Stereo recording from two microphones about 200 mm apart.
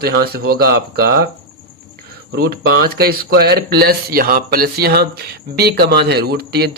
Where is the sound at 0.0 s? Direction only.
50° right (ahead or behind).